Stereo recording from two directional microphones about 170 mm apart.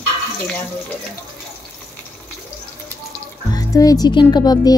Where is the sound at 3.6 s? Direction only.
20° left (ahead or behind).